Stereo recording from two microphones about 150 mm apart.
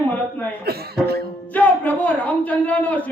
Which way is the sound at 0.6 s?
90° right.